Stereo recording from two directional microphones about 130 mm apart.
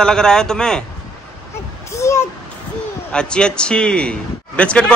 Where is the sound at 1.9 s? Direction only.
25° left (ahead or behind).